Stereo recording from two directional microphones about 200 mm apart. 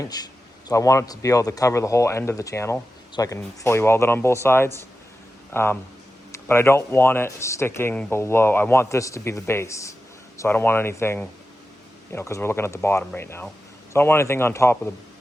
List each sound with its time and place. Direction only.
0.0 s speech: 20° left (ahead or behind)